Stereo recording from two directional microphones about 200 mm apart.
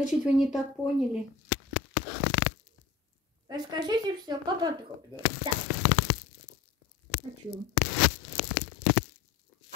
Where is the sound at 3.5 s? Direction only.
20° right (ahead or behind).